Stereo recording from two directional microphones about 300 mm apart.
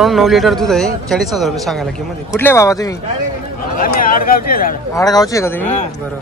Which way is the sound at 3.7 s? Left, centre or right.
Left.